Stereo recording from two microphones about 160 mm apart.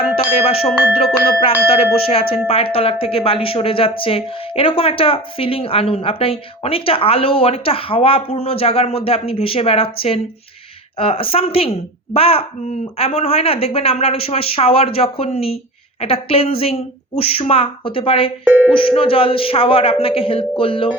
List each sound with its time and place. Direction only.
0.3 s a sound: 35° left (ahead or behind)
0.9 s speech: 35° left (ahead or behind)
18.4 s busy signal: 10° right (ahead or behind)
18.7 s speech: 35° left (ahead or behind)